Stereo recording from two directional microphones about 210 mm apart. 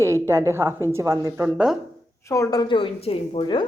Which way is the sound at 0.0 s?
15° right (ahead or behind).